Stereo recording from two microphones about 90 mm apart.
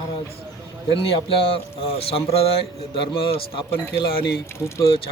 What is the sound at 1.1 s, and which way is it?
Speech, 90° left.